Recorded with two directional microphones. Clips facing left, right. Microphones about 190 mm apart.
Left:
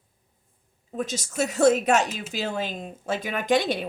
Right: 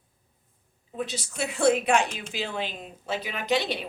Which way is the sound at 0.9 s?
45° left (ahead or behind).